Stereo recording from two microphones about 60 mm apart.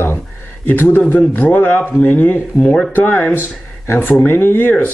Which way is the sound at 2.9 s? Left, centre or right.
Left.